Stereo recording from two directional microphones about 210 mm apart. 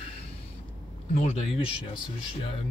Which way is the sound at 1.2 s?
30° left (ahead or behind).